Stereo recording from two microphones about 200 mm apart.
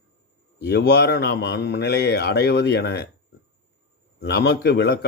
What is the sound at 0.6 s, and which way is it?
A man's voice, 55° left (ahead or behind).